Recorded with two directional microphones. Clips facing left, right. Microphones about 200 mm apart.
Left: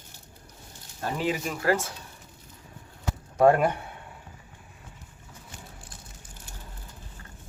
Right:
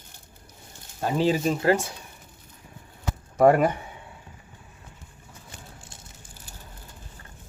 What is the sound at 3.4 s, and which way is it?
Speech, 5° right (ahead or behind).